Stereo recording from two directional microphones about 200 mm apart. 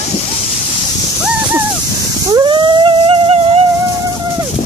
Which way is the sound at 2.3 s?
20° right (ahead or behind).